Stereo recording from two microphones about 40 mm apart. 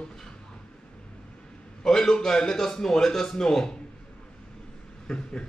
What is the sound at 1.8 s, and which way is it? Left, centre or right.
A man's voice, centre.